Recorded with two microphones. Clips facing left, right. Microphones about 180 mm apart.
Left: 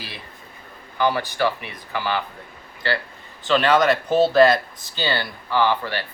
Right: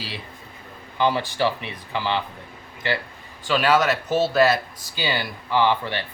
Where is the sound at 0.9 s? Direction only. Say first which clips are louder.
Even; 20° right (ahead or behind).